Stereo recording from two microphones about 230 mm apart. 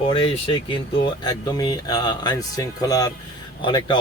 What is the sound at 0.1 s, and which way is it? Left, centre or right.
Speech, left.